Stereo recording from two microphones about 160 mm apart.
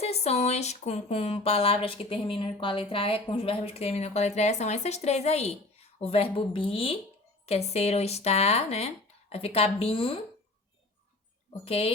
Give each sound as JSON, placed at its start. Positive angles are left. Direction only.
{"t": 0.0, "sound": "speech", "side_deg": 40}
{"t": 11.6, "sound": "speech", "side_deg": 40}